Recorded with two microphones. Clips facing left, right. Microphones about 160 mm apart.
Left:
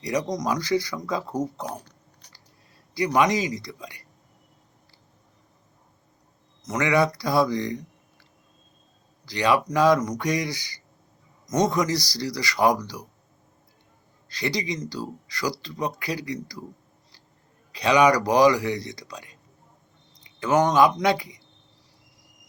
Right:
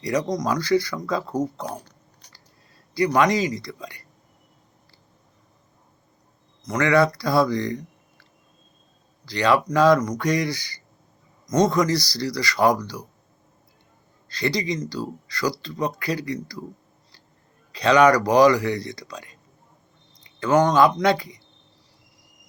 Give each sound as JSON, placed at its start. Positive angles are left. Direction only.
{"t": 0.0, "sound": "speech", "side_deg": 15}
{"t": 3.2, "sound": "speech", "side_deg": 15}
{"t": 6.7, "sound": "speech", "side_deg": 20}
{"t": 14.3, "sound": "speech", "side_deg": 15}
{"t": 17.7, "sound": "speech", "side_deg": 15}